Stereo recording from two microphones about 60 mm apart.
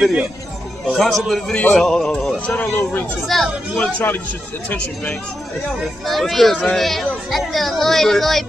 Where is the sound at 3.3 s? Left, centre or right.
Centre.